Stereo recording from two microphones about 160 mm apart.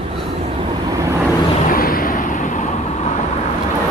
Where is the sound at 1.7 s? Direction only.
65° left (ahead or behind).